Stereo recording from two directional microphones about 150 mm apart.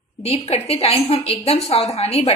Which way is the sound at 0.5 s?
45° left (ahead or behind).